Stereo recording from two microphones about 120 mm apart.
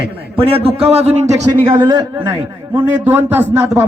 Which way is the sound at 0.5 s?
55° right (ahead or behind).